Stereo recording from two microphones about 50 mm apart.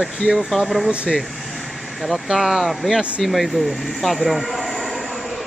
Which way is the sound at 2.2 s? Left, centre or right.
Centre.